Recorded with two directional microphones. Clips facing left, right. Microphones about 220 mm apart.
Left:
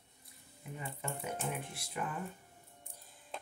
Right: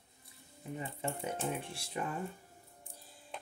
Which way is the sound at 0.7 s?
30° right (ahead or behind).